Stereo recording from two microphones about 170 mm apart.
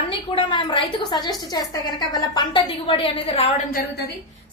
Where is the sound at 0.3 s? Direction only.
30° left (ahead or behind).